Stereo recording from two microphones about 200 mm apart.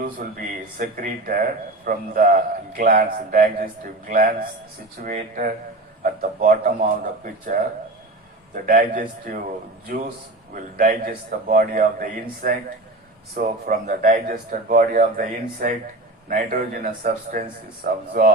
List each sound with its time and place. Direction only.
0.0 s a man's voice: 45° right (ahead or behind)
8.6 s a man's voice: 45° right (ahead or behind)
10.5 s a man's voice: 45° right (ahead or behind)